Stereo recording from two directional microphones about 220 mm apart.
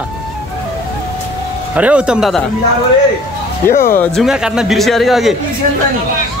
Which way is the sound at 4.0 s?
Centre (ahead or behind).